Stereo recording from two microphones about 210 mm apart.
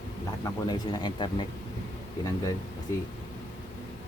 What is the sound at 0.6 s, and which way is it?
Speech, 20° left (ahead or behind).